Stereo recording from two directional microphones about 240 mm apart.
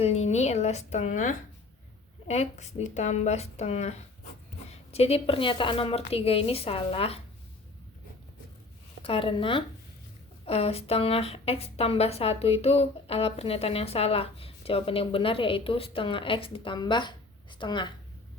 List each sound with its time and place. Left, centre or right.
0.0 s speech: left
9.0 s speech: left